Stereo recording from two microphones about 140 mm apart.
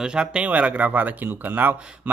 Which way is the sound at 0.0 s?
5° right (ahead or behind).